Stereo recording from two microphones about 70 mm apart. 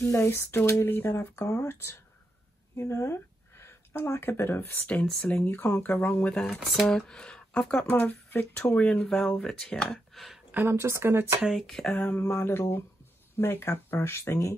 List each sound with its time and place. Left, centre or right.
0.0 s speech: left
6.6 s speech: centre
7.1 s speech: centre
7.9 s speech: left
9.0 s speech: centre
10.1 s a sound: centre
10.5 s speech: right
11.5 s speech: centre
12.2 s speech: left